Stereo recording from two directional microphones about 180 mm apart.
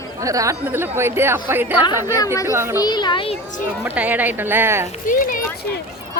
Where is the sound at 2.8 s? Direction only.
25° left (ahead or behind).